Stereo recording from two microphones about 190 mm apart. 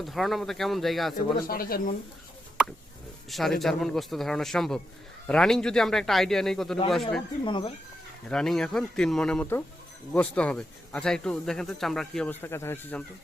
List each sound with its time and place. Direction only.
0.0 s speech: centre (ahead or behind)
1.1 s speech: 50° left (ahead or behind)
3.2 s speech: centre (ahead or behind)
7.4 s speech: 25° left (ahead or behind)
8.3 s speech: 5° left (ahead or behind)